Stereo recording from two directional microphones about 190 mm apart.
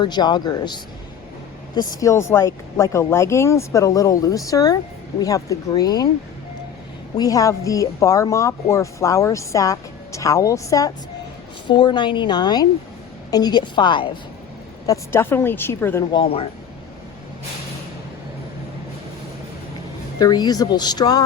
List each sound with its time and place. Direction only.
0.0 s speech: 25° left (ahead or behind)
7.2 s speech: 20° left (ahead or behind)
14.8 s speech: 10° left (ahead or behind)
16.1 s speech: 30° left (ahead or behind)
20.1 s speech: 20° left (ahead or behind)